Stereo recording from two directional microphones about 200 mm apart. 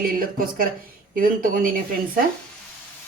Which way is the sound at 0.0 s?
45° right (ahead or behind).